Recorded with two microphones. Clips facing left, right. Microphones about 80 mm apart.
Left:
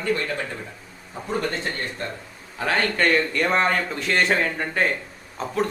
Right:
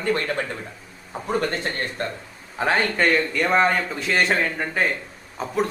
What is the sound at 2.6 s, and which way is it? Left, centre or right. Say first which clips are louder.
Speech: right 2 dB; right.